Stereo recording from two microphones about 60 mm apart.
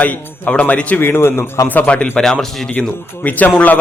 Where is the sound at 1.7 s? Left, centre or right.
Left.